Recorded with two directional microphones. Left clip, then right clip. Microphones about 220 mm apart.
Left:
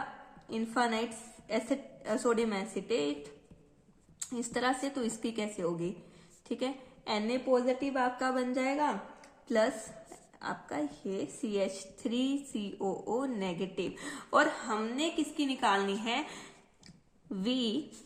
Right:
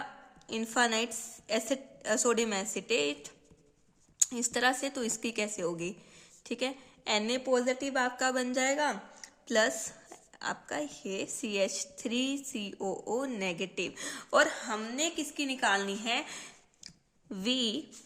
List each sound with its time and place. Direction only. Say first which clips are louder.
0.4 s a woman's voice: right 2 dB; 40° right (ahead or behind)
16.0 s a sound: right 1 dB; 30° right (ahead or behind)
17.2 s speech: right 2 dB; 35° right (ahead or behind)